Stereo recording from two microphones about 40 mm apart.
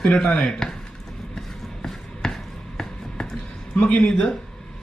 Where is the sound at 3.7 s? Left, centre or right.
Left.